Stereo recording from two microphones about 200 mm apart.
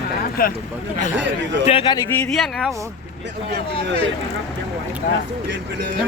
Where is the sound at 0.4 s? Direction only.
45° left (ahead or behind).